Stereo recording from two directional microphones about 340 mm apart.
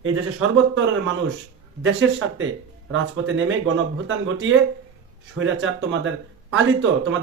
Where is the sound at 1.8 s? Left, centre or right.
Right.